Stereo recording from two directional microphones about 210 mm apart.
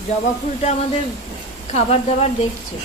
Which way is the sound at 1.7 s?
30° left (ahead or behind).